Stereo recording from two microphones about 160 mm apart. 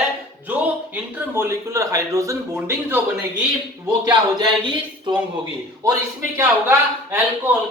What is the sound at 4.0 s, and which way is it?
Speech, 25° right (ahead or behind).